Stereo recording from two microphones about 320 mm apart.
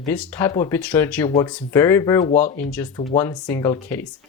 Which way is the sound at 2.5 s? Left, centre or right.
Centre.